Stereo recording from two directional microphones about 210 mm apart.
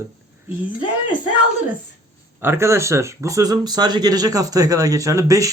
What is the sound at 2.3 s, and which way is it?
Speech, 10° right (ahead or behind).